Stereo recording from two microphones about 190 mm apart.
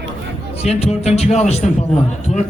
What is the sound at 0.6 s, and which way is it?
Speech, 35° left (ahead or behind).